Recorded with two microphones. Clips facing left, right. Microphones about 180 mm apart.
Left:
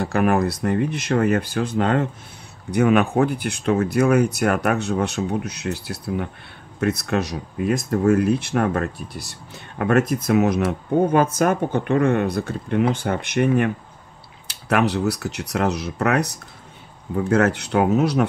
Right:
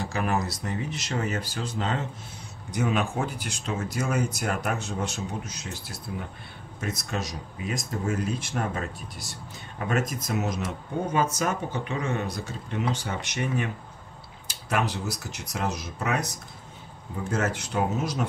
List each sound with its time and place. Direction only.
0.0 s speech: 60° left (ahead or behind)